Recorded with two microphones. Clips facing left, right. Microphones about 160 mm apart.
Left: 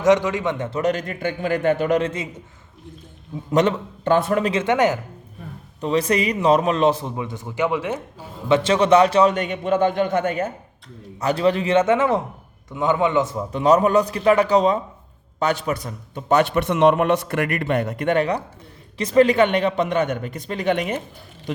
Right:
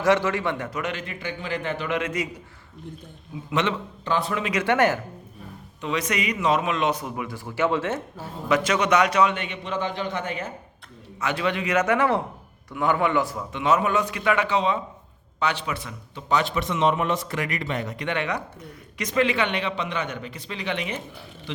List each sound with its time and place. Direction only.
0.0 s a man's voice: 20° left (ahead or behind)
0.8 s a man's voice: 40° left (ahead or behind)
2.0 s a man's voice: 30° left (ahead or behind)
3.5 s a man's voice: 40° left (ahead or behind)
4.5 s speech: 20° left (ahead or behind)
5.8 s a man's voice: 35° left (ahead or behind); by 8.3 s 15° left (ahead or behind)
8.4 s a man's voice: 25° left (ahead or behind)
9.3 s a man's voice: 45° left (ahead or behind)
11.2 s a man's voice: 35° left (ahead or behind)
13.5 s a man's voice: 40° left (ahead or behind)